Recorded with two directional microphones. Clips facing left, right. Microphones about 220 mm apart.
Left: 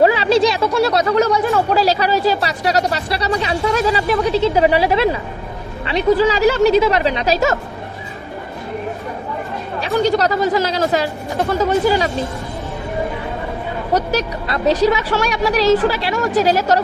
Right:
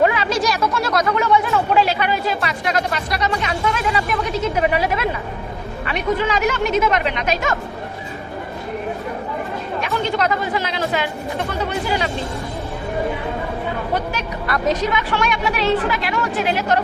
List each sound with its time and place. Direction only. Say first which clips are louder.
0.0 s speech: left 5 dB; 30° left (ahead or behind)
9.8 s speech: left 6 dB; 40° left (ahead or behind)
13.9 s speech: left 5 dB; 40° left (ahead or behind)